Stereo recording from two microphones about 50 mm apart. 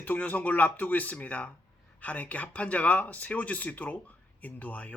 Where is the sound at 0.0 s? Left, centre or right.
Left.